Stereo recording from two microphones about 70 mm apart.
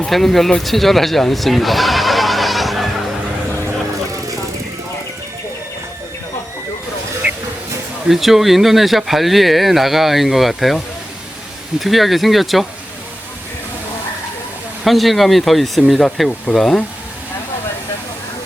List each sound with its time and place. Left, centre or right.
0.0 s speech: centre
7.2 s vehicle: right
8.0 s speech: centre
14.8 s speech: centre